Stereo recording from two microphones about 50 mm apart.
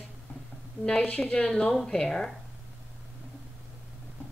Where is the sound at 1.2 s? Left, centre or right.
Centre.